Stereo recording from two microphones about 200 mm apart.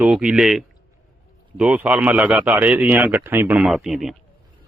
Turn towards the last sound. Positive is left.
turn(degrees=0)  # may be behind; listen again after turning